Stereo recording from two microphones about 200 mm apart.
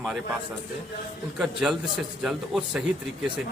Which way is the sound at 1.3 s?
Centre (ahead or behind).